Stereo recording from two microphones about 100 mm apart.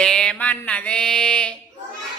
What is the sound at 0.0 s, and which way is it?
Music, 5° left (ahead or behind).